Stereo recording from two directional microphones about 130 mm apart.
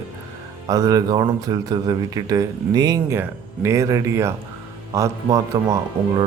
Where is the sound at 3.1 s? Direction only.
20° right (ahead or behind).